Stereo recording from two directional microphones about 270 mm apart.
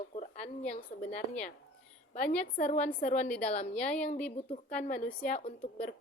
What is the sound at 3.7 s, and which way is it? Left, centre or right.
Speech, centre.